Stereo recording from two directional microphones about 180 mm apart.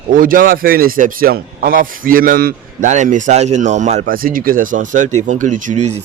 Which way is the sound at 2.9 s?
45° right (ahead or behind).